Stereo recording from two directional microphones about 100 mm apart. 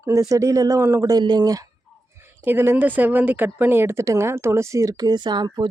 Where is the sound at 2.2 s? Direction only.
20° right (ahead or behind).